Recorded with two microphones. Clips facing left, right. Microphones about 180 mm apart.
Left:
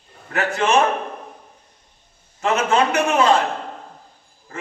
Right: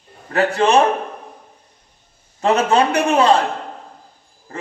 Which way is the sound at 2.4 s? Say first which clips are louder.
Right 3 dB; 35° right (ahead or behind).